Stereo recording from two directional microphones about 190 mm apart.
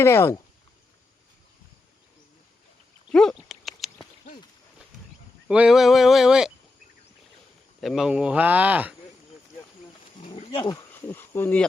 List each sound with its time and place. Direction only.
0.0 s speech: 15° left (ahead or behind)
3.1 s dog: 5° left (ahead or behind)
5.5 s speech: 5° right (ahead or behind)
7.8 s speech: centre (ahead or behind)
10.2 s wild animals: 30° left (ahead or behind); by 11.6 s 10° left (ahead or behind)